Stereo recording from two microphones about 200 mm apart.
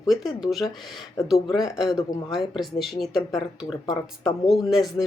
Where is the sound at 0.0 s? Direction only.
Centre (ahead or behind).